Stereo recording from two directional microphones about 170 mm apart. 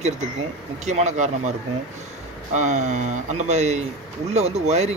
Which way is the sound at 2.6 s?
45° right (ahead or behind).